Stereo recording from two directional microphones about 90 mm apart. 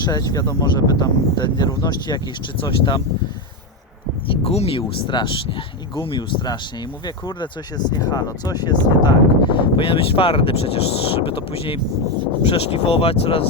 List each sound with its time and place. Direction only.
0.0 s speech: 45° left (ahead or behind)
2.6 s speech: 65° left (ahead or behind)
4.3 s speech: 90° left; by 6.6 s 55° left (ahead or behind)
7.9 s speech: 50° left (ahead or behind); by 13.5 s 90° left